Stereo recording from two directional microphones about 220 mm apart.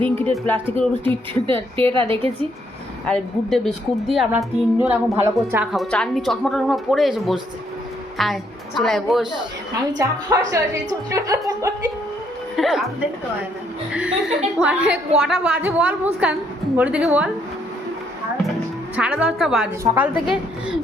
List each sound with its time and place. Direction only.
0.2 s speech: 10° left (ahead or behind)
1.3 s a woman's voice: 25° right (ahead or behind)
3.1 s a woman's voice: centre (ahead or behind)
5.7 s speech: centre (ahead or behind)
10.0 s a woman's voice: 15° right (ahead or behind)
12.5 s speech: centre (ahead or behind)
13.9 s a woman's voice: 5° right (ahead or behind)
18.9 s a woman's voice: 5° right (ahead or behind)